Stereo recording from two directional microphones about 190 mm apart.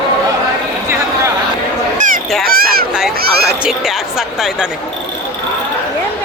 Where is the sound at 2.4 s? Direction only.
50° right (ahead or behind).